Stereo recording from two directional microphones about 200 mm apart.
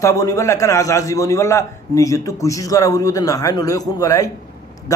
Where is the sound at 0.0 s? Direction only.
15° left (ahead or behind).